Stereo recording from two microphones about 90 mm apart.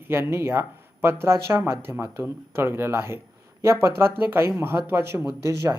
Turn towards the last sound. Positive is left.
turn(degrees=-35)  # may be behind; listen again after turning